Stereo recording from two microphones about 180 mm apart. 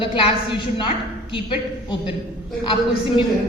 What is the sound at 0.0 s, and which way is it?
Speech, 30° left (ahead or behind).